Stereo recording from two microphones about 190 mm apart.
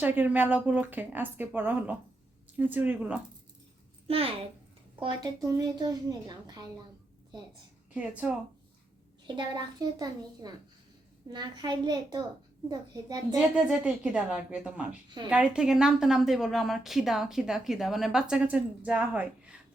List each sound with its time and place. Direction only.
0.0 s speech: 10° right (ahead or behind)
4.0 s a woman's voice: 30° right (ahead or behind)
7.9 s speech: 5° right (ahead or behind)
9.2 s a woman's voice: 25° right (ahead or behind)
13.7 s a woman's voice: 5° right (ahead or behind)